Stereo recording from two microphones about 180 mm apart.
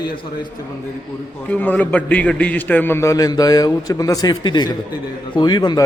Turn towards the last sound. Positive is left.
turn(degrees=25)  # may be behind; listen again after turning